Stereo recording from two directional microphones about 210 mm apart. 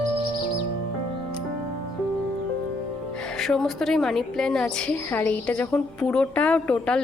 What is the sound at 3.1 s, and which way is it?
A woman's voice, 5° left (ahead or behind).